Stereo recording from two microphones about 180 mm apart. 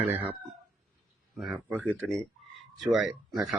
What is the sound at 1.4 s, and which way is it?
Speech, centre (ahead or behind).